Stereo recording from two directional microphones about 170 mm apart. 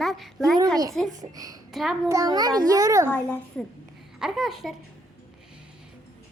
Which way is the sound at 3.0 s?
10° left (ahead or behind).